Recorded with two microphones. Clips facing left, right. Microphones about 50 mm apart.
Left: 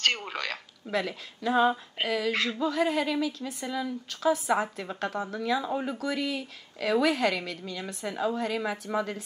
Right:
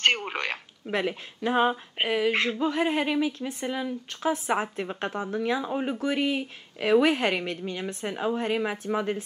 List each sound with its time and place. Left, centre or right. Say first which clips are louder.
0.0 s a woman's voice: right 4 dB; right